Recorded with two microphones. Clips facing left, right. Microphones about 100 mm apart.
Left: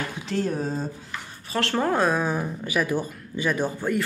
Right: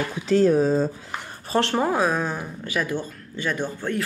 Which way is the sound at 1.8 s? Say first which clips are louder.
Left 4 dB; 5° right (ahead or behind).